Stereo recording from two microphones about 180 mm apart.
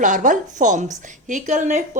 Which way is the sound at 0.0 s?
45° right (ahead or behind).